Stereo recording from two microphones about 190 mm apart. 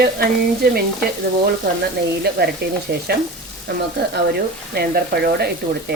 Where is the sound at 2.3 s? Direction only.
60° right (ahead or behind).